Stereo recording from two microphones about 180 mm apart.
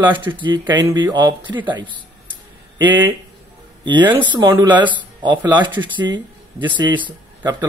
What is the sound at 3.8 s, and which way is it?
Speech, 25° right (ahead or behind).